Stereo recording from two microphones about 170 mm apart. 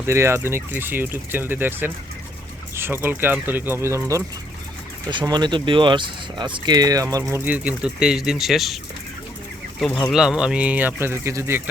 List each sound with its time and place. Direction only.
0.0 s speech: 15° right (ahead or behind)
10.1 s speech: 5° right (ahead or behind)